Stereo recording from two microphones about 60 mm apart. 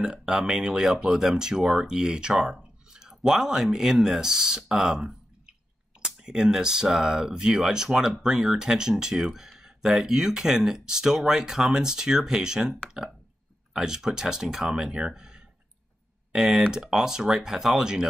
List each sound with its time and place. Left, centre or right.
0.0 s speech: centre
13.7 s speech: centre